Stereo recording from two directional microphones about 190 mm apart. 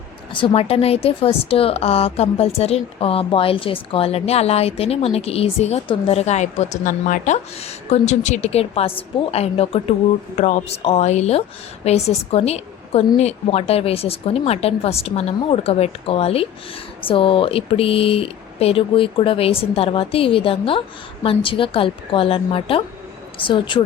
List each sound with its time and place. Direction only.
0.3 s a woman's voice: 30° left (ahead or behind)